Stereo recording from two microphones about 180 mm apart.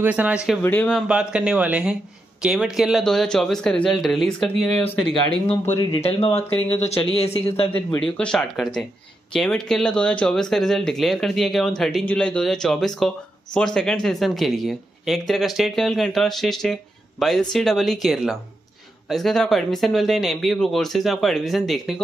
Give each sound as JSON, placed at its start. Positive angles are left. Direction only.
{"t": 0.0, "sound": "speech", "side_deg": -10}
{"t": 0.6, "sound": "speech", "side_deg": 10}
{"t": 0.9, "sound": "speech", "side_deg": -5}
{"t": 5.8, "sound": "speech", "side_deg": 30}
{"t": 7.7, "sound": "speech", "side_deg": 5}